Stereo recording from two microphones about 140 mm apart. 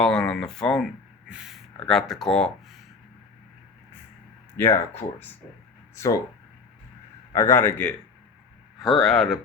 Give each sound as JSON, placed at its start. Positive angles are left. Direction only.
{"t": 0.0, "sound": "speech", "side_deg": 5}
{"t": 4.5, "sound": "speech", "side_deg": 20}
{"t": 7.3, "sound": "speech", "side_deg": 20}
{"t": 8.8, "sound": "speech", "side_deg": 0}